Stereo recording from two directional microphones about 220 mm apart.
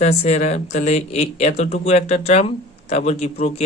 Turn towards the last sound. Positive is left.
turn(degrees=30)  # may be behind; listen again after turning